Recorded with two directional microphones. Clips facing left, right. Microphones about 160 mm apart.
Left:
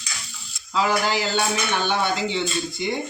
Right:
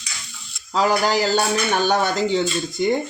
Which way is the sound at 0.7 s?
40° right (ahead or behind).